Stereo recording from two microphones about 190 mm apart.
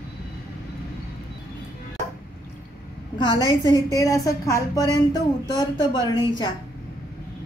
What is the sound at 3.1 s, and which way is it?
A woman's voice, 20° left (ahead or behind).